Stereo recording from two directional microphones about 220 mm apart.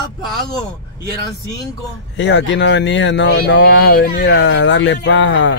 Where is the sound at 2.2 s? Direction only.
60° left (ahead or behind).